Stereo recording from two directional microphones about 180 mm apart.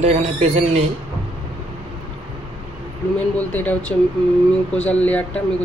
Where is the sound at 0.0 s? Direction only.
35° right (ahead or behind).